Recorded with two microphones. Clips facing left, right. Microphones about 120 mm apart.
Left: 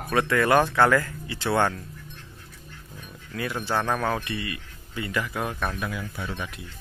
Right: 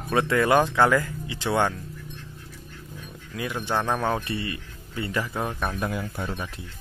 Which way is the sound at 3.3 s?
15° right (ahead or behind).